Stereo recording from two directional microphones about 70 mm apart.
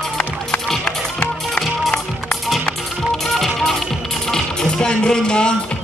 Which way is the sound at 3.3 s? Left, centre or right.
Centre.